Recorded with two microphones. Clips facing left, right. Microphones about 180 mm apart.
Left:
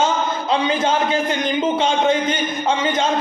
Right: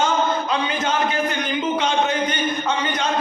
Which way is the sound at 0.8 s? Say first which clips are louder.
Left 3 dB; 30° left (ahead or behind).